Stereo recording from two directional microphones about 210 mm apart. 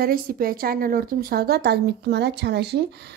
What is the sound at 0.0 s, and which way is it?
A woman's voice, 45° right (ahead or behind).